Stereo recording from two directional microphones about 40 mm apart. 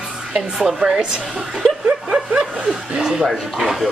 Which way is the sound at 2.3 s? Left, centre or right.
Right.